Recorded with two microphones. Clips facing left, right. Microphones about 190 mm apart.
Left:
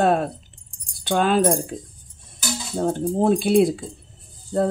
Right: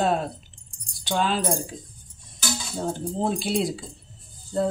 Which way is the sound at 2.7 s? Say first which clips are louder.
Left 8 dB; 55° left (ahead or behind).